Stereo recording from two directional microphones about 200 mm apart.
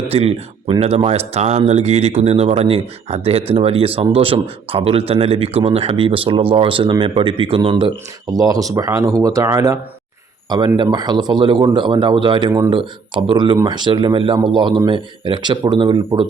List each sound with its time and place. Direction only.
0.1 s speech: 30° right (ahead or behind)